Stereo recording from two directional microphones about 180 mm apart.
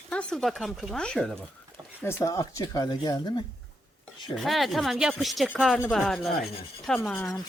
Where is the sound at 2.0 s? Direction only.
15° left (ahead or behind).